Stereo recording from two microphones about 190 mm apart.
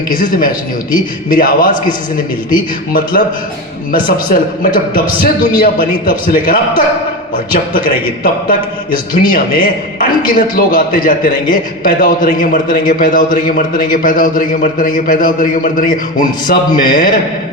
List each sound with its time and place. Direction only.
0.1 s a man's voice: 45° left (ahead or behind)
2.9 s a man's voice: 45° left (ahead or behind)